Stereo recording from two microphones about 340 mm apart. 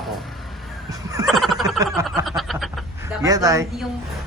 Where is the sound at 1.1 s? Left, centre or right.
Centre.